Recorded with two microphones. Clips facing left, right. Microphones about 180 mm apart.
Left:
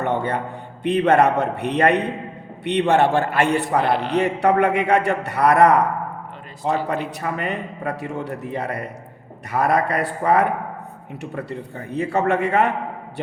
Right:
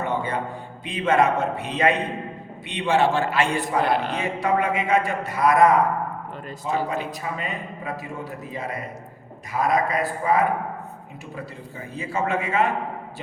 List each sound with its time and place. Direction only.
0.0 s a sound: 65° left (ahead or behind)
0.9 s a man's voice: 65° left (ahead or behind)
6.8 s a man's voice: 65° left (ahead or behind)